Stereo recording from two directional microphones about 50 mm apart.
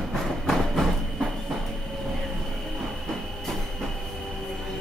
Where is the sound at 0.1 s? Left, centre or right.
Centre.